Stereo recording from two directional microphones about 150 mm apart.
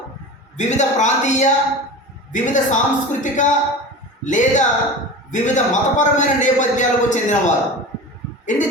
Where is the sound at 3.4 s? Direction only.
55° left (ahead or behind).